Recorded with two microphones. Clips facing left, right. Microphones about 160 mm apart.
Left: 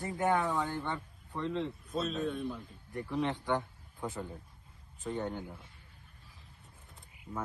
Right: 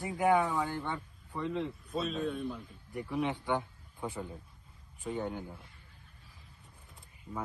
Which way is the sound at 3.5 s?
15° right (ahead or behind).